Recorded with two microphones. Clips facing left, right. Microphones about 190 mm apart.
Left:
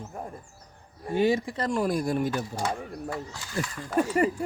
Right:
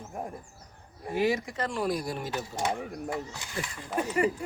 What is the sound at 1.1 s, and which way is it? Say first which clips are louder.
Speech: left 3 dB; 30° left (ahead or behind).